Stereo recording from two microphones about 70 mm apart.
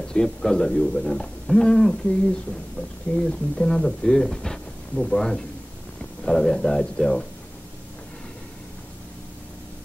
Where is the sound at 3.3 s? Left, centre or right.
Centre.